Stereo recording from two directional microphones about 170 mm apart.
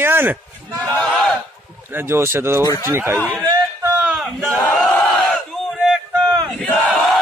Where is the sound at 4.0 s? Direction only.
5° right (ahead or behind).